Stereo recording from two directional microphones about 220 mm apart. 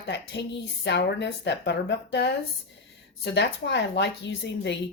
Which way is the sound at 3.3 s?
50° left (ahead or behind).